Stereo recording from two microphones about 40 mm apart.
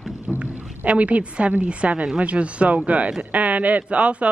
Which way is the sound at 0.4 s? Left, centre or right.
Right.